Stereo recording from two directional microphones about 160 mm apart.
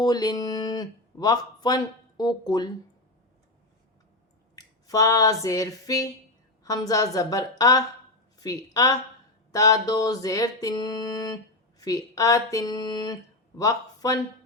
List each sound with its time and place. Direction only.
0.0 s speech: 25° left (ahead or behind)
4.5 s speech: 20° left (ahead or behind)